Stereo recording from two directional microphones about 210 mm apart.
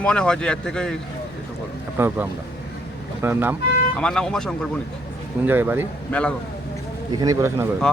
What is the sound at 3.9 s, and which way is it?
Speech, 5° left (ahead or behind).